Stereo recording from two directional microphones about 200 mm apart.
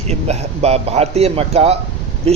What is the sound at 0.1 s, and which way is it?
A man's voice, 30° right (ahead or behind).